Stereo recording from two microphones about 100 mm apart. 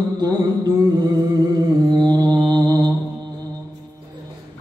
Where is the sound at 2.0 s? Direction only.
40° right (ahead or behind).